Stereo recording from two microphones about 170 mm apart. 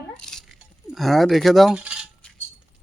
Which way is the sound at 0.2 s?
5° left (ahead or behind).